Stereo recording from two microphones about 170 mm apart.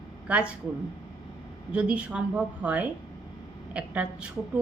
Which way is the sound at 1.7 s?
5° right (ahead or behind).